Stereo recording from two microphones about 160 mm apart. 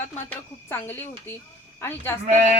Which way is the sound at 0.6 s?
15° left (ahead or behind).